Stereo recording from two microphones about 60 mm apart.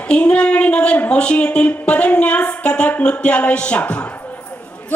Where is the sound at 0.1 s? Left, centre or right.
Centre.